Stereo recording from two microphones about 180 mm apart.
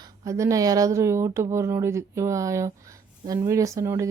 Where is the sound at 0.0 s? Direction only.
15° right (ahead or behind).